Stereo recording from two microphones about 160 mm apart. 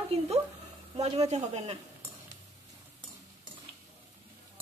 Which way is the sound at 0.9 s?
40° right (ahead or behind).